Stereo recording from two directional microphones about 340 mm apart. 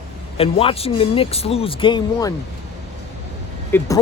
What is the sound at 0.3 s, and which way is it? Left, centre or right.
Speech, centre.